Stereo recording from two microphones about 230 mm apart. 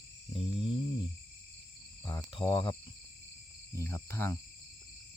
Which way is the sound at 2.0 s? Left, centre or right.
Centre.